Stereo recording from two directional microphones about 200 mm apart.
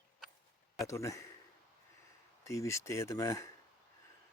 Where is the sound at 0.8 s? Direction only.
15° left (ahead or behind).